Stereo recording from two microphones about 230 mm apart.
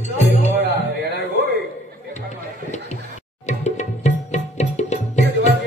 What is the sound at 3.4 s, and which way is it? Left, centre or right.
Music, left.